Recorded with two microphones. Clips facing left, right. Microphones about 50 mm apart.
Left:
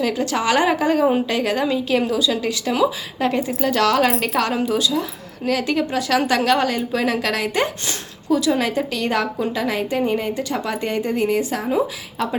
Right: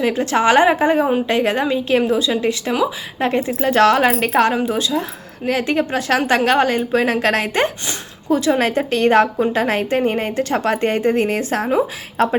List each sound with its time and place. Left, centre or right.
0.0 s a woman's voice: right